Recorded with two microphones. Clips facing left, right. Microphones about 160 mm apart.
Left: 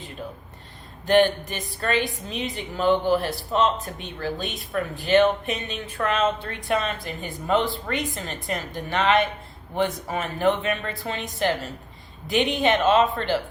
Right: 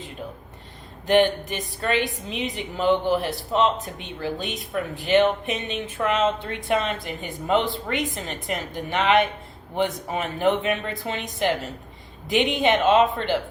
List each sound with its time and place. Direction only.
1.0 s speech: 20° right (ahead or behind)